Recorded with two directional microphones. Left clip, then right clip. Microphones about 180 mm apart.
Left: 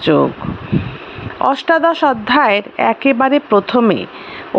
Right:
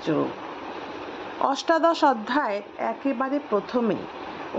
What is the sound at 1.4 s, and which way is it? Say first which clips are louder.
Speech: left 9 dB; 20° left (ahead or behind).